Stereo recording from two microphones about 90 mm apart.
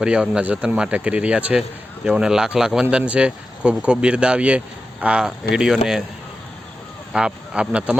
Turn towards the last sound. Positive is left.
turn(degrees=-10)  # may be behind; listen again after turning